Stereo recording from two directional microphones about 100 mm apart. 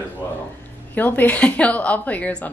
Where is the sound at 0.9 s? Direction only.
20° left (ahead or behind).